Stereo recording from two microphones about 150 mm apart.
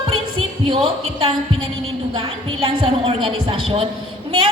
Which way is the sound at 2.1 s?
35° right (ahead or behind).